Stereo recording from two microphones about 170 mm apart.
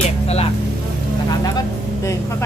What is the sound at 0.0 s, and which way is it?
Vehicle, 40° left (ahead or behind).